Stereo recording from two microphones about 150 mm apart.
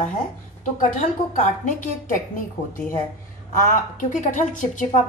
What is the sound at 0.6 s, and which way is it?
A woman's voice, 60° left (ahead or behind).